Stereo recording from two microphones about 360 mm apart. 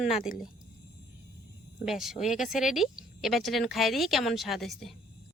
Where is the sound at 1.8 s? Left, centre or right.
Centre.